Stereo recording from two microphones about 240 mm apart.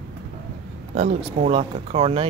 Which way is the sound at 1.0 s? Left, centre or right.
Right.